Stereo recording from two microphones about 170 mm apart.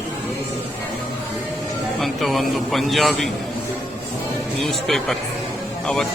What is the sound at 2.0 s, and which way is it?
A man's voice, centre (ahead or behind).